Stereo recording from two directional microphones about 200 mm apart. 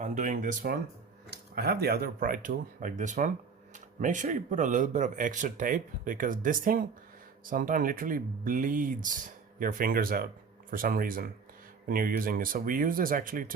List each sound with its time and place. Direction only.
0.0 s speech: 40° right (ahead or behind)